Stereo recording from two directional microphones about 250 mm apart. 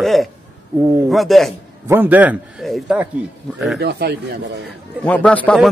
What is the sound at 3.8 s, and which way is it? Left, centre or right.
Speech, right.